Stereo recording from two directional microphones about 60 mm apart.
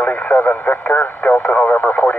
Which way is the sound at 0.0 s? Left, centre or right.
Left.